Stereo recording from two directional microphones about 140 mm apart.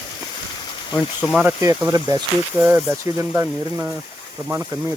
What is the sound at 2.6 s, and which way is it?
Speech, 15° right (ahead or behind).